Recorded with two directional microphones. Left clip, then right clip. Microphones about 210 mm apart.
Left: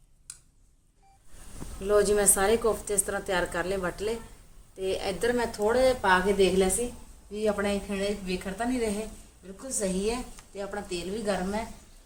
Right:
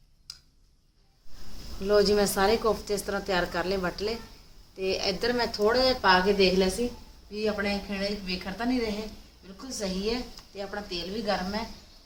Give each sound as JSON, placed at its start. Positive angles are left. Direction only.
{"t": 1.8, "sound": "speech", "side_deg": 5}
{"t": 7.3, "sound": "a woman's voice", "side_deg": 25}